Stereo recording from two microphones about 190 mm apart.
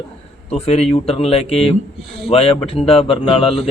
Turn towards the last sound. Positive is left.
turn(degrees=30)  # may be behind; listen again after turning